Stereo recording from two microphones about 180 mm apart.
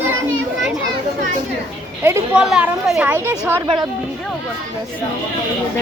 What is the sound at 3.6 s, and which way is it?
Speech, 25° right (ahead or behind).